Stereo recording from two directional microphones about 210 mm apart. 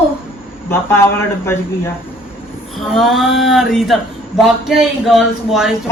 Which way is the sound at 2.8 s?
Centre (ahead or behind).